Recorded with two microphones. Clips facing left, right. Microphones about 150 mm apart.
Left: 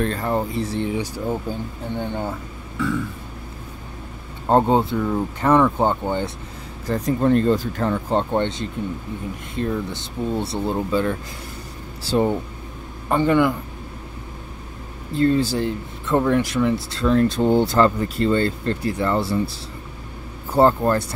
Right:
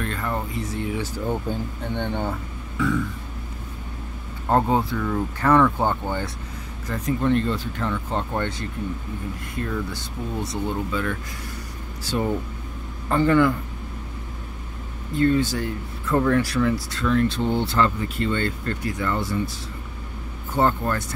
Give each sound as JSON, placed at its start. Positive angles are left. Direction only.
{"t": 0.0, "sound": "speech", "side_deg": 35}
{"t": 0.9, "sound": "a man's voice", "side_deg": 10}
{"t": 4.5, "sound": "speech", "side_deg": 25}
{"t": 6.9, "sound": "speech", "side_deg": 35}
{"t": 13.1, "sound": "a man's voice", "side_deg": 15}
{"t": 15.1, "sound": "speech", "side_deg": 30}
{"t": 16.9, "sound": "speech", "side_deg": 35}
{"t": 20.5, "sound": "speech", "side_deg": 35}